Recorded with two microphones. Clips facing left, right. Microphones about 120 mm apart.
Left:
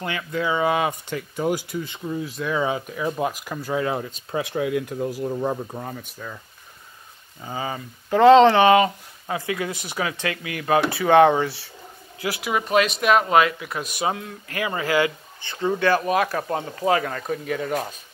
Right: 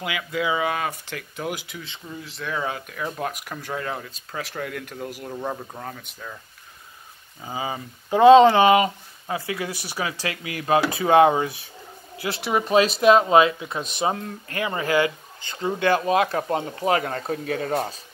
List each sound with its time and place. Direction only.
0.0 s speech: 10° right (ahead or behind)
0.7 s speech: 15° left (ahead or behind)
4.3 s speech: 20° left (ahead or behind)
4.6 s speech: 10° left (ahead or behind)
7.4 s speech: 10° right (ahead or behind)
11.0 s speech: 15° right (ahead or behind)
12.3 s speech: 30° right (ahead or behind)